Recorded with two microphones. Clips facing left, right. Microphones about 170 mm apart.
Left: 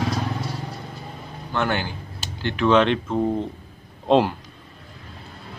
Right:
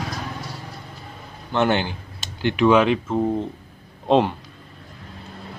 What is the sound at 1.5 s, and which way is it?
A man's voice, 20° right (ahead or behind).